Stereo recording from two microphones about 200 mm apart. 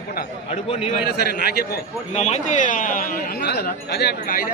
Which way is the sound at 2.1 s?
35° left (ahead or behind).